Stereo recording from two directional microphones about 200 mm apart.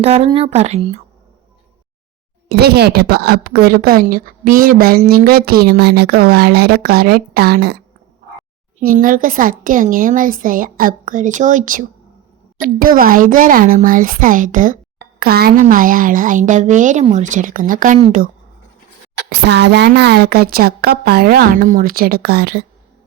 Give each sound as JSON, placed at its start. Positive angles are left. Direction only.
{"t": 0.0, "sound": "a woman's voice", "side_deg": -30}
{"t": 2.5, "sound": "speech", "side_deg": -55}
{"t": 8.8, "sound": "a woman's voice", "side_deg": -45}
{"t": 19.3, "sound": "speech", "side_deg": -55}